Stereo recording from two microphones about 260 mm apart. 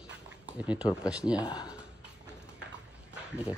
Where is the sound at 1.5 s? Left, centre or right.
Centre.